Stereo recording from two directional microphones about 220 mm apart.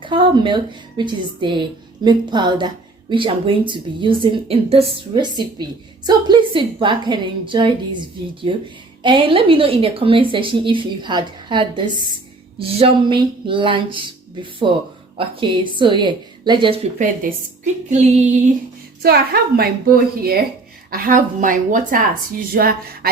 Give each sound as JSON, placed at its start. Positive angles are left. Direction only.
{"t": 0.0, "sound": "a woman's voice", "side_deg": -20}
{"t": 19.0, "sound": "a woman's voice", "side_deg": -45}
{"t": 20.9, "sound": "speech", "side_deg": -40}